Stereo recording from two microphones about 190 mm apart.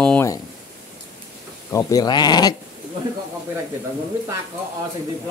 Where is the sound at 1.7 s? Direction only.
20° left (ahead or behind).